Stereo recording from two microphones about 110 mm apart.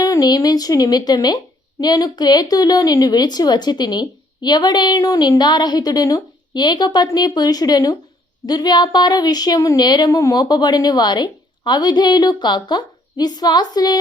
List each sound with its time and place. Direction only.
0.0 s a woman's voice: 35° left (ahead or behind)